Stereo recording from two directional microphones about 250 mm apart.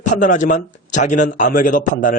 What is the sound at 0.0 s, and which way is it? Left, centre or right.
A man's voice, left.